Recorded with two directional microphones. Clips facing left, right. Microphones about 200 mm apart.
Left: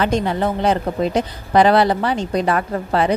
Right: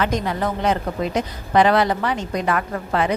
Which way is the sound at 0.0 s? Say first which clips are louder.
Left 3 dB; 30° left (ahead or behind).